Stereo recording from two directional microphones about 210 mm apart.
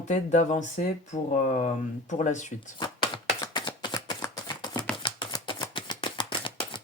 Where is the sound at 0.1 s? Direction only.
35° left (ahead or behind).